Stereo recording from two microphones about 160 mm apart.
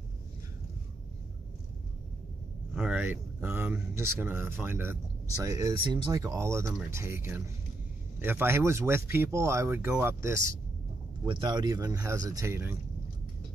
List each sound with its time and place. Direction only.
2.7 s speech: 10° right (ahead or behind)
11.2 s speech: 30° right (ahead or behind)